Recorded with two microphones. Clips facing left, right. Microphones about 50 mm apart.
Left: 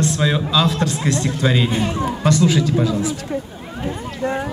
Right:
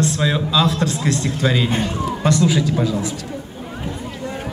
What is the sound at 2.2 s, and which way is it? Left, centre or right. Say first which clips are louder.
Speech: left 1 dB; centre.